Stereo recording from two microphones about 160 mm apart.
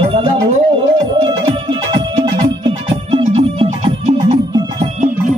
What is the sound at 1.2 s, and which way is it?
Music, 30° right (ahead or behind).